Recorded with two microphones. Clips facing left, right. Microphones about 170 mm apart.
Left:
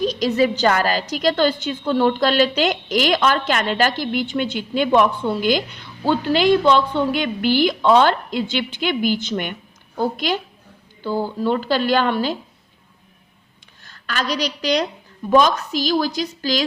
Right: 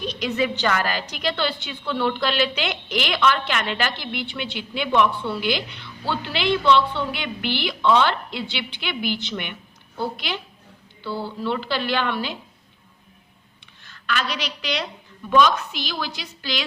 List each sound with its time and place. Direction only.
0.0 s a woman's voice: 40° left (ahead or behind)
13.8 s a woman's voice: 40° left (ahead or behind)